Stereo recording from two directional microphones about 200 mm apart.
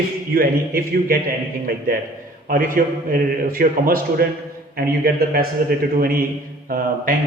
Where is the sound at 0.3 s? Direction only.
45° right (ahead or behind).